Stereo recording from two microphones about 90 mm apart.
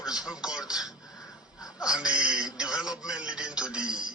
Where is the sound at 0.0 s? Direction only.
10° right (ahead or behind).